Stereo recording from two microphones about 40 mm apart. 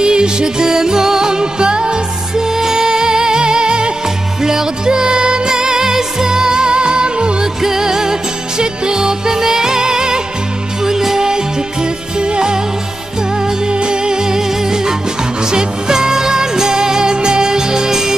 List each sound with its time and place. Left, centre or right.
0.0 s music: right
7.6 s music: centre
13.7 s music: right